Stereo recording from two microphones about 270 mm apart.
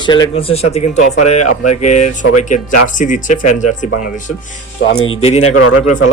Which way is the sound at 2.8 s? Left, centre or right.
Left.